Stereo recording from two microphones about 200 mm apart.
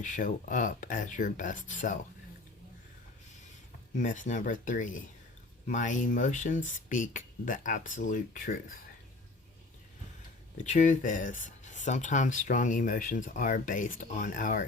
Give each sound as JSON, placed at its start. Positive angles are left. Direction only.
{"t": 0.0, "sound": "speech", "side_deg": 40}
{"t": 3.9, "sound": "speech", "side_deg": 40}
{"t": 10.6, "sound": "speech", "side_deg": 40}